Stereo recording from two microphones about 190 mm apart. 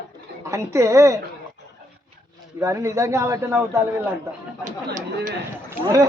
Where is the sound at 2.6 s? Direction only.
15° right (ahead or behind).